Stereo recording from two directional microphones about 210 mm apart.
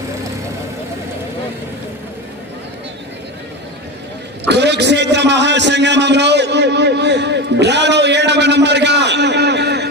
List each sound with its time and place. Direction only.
4.4 s a man's voice: 55° right (ahead or behind)